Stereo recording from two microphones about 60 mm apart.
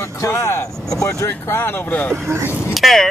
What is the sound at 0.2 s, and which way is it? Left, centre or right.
Speech, left.